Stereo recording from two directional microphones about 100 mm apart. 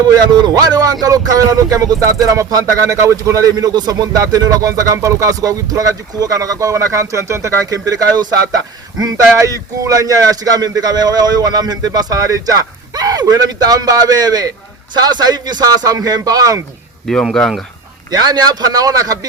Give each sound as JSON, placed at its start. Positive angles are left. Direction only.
{"t": 0.1, "sound": "speech", "side_deg": -45}
{"t": 18.1, "sound": "speech", "side_deg": -40}